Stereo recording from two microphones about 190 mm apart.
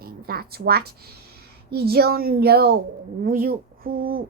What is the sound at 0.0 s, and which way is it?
A woman's voice, 50° right (ahead or behind).